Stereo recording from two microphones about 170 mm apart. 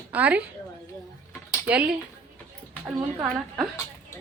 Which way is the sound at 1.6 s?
10° right (ahead or behind).